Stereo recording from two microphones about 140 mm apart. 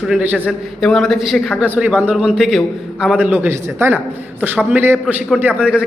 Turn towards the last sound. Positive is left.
turn(degrees=-10)  # may be behind; listen again after turning